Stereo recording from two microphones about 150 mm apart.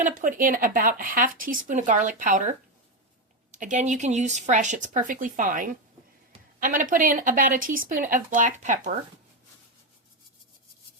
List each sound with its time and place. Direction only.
0.0 s speech: 60° right (ahead or behind)
3.6 s speech: 55° right (ahead or behind)